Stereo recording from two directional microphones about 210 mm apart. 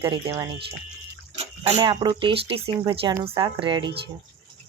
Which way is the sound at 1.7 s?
30° right (ahead or behind).